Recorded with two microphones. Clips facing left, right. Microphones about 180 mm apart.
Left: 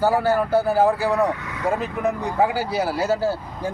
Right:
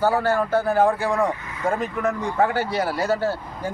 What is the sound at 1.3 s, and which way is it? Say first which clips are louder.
Speech: left 2 dB; 70° left (ahead or behind).